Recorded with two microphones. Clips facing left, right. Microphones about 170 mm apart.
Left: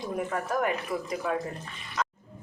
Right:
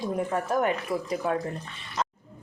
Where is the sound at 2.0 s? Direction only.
25° right (ahead or behind).